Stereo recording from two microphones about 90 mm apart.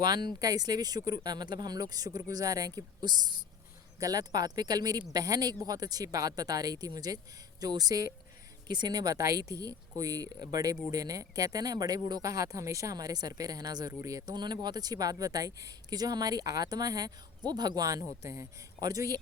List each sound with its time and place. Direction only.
0.0 s speech: 50° right (ahead or behind)